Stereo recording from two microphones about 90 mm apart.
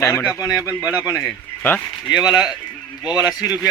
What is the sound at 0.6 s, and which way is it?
Speech, 30° left (ahead or behind).